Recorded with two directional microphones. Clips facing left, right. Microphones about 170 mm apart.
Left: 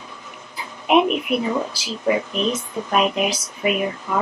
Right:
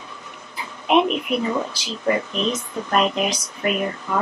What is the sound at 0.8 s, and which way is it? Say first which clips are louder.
Speech: left 1 dB; 5° left (ahead or behind).